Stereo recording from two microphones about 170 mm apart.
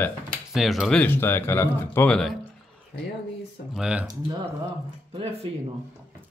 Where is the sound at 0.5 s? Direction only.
Centre (ahead or behind).